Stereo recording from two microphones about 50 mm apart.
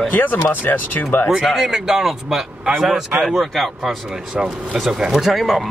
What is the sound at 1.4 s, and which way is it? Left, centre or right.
Speech, centre.